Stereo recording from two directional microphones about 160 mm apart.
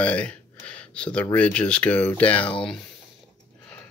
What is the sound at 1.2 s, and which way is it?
Speech, 10° left (ahead or behind).